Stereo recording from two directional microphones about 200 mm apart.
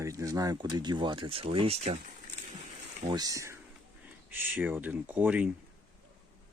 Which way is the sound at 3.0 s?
20° right (ahead or behind).